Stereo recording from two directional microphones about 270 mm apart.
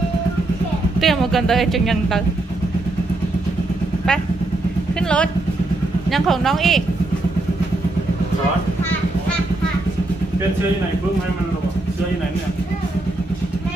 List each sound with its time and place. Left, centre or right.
1.0 s speech: centre
5.0 s speech: centre